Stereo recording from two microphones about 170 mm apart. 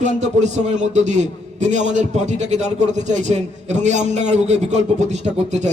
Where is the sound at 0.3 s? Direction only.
45° right (ahead or behind).